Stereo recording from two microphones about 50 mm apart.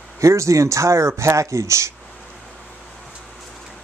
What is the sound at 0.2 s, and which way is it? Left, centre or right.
Speech, right.